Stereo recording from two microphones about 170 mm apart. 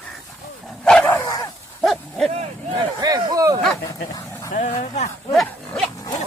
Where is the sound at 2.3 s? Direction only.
35° right (ahead or behind).